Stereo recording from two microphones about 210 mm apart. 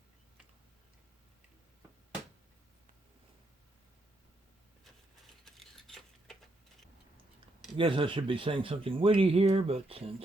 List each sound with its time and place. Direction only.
5.5 s keys jangling: centre (ahead or behind)
7.8 s speech: 25° right (ahead or behind)